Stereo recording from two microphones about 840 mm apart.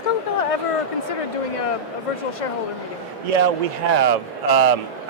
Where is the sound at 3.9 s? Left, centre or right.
Right.